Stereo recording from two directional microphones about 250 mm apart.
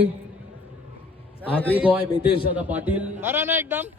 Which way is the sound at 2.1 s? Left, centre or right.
Left.